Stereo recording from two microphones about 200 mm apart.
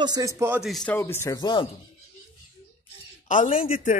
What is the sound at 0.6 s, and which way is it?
Speech, centre (ahead or behind).